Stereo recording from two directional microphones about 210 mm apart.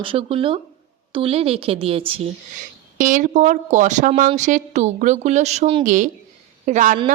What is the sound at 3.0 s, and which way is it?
A woman's voice, 40° right (ahead or behind).